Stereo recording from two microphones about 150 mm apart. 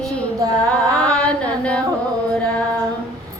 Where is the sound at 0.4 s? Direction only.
25° right (ahead or behind).